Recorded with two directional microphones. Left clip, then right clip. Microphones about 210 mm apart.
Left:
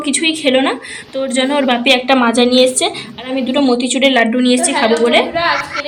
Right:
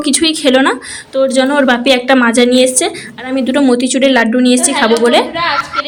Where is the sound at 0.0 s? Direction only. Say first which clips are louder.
Right 3 dB; 20° right (ahead or behind).